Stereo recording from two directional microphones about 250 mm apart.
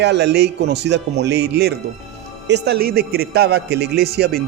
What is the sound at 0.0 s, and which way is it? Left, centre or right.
Speech, right.